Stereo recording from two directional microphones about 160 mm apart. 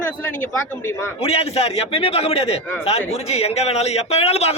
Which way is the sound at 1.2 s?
40° left (ahead or behind).